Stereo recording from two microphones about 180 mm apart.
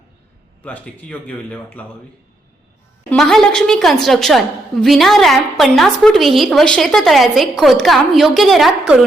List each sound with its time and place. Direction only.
0.6 s speech: 10° left (ahead or behind)
3.1 s a woman's voice: centre (ahead or behind)